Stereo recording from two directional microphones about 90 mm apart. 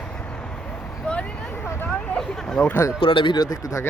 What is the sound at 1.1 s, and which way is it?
Speech, 10° left (ahead or behind).